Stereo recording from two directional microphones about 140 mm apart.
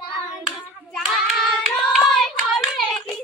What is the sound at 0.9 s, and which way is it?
Hands, centre (ahead or behind).